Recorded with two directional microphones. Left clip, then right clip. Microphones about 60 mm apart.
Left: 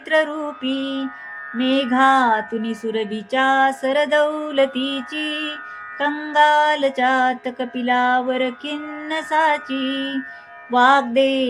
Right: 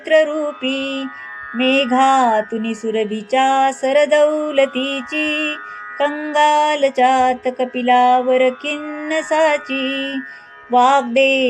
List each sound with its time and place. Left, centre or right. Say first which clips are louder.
0.1 s mantra: right 5 dB; right
1.5 s music: right 4 dB; right
10.8 s mantra: right 2 dB; right